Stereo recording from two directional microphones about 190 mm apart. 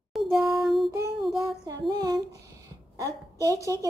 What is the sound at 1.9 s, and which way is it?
A woman's voice, 20° right (ahead or behind).